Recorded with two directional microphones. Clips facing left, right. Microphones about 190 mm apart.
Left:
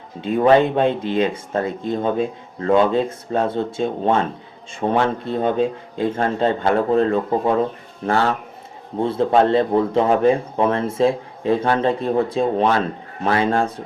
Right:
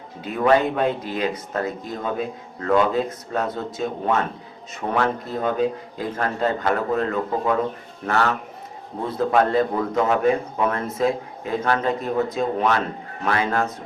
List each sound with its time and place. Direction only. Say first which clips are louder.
0.2 s speech: left 4 dB; 30° left (ahead or behind)